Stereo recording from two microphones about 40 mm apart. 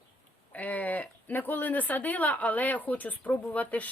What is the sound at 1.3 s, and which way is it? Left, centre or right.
A woman's voice, left.